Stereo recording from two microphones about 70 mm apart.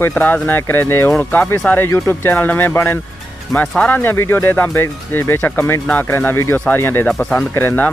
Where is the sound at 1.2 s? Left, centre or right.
Left.